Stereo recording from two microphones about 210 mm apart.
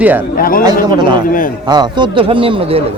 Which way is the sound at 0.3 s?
45° left (ahead or behind).